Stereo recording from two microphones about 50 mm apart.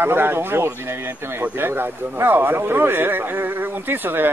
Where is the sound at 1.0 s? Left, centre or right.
Right.